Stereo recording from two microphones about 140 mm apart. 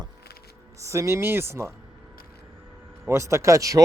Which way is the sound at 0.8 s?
20° right (ahead or behind).